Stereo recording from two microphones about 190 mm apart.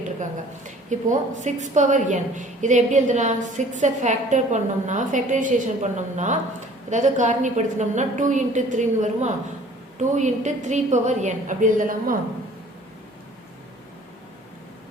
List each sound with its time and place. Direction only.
0.2 s a woman's voice: 40° right (ahead or behind)